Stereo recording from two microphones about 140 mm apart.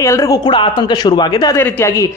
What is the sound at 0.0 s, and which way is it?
Speech, 20° left (ahead or behind).